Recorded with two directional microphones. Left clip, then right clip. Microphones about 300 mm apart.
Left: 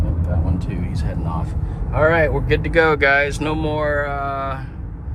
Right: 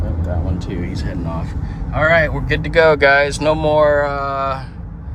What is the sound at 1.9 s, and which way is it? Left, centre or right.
Speech, centre.